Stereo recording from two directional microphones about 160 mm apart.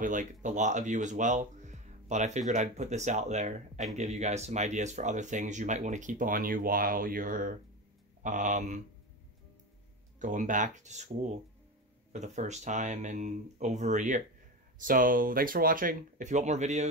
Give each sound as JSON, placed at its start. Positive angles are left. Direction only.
{"t": 0.0, "sound": "speech", "side_deg": -55}
{"t": 10.1, "sound": "speech", "side_deg": -55}